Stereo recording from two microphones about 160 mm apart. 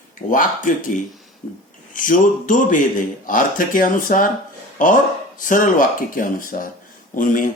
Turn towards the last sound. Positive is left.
turn(degrees=55)  # may be behind; listen again after turning